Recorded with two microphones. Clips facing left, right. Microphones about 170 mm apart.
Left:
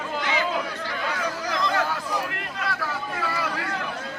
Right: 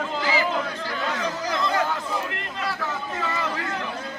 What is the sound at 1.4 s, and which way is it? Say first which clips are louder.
Chatter: right 1 dB; 5° right (ahead or behind).